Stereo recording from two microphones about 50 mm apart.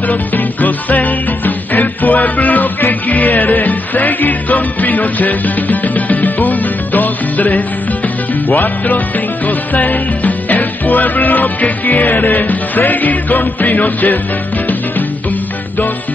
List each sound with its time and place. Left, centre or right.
0.1 s music: left